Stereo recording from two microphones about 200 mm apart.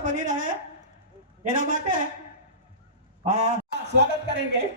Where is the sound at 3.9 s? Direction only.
60° right (ahead or behind).